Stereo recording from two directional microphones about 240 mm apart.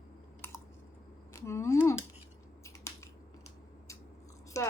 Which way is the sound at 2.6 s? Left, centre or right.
Centre.